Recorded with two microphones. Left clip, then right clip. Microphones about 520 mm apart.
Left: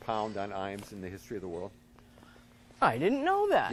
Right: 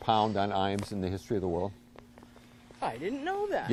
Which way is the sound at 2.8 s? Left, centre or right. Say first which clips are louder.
Left 7 dB; left.